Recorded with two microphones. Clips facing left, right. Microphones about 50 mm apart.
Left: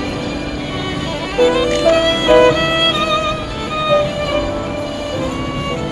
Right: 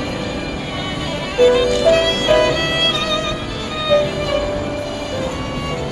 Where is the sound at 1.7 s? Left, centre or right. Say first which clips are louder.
Left 1 dB; left.